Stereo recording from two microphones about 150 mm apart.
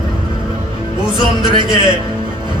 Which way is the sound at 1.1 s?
30° right (ahead or behind).